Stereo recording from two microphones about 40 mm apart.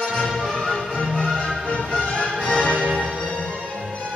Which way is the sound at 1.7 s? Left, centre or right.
Left.